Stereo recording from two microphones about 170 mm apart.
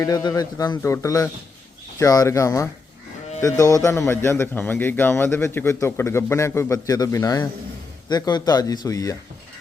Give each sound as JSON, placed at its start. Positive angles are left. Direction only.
{"t": 0.0, "sound": "a man's voice", "side_deg": 25}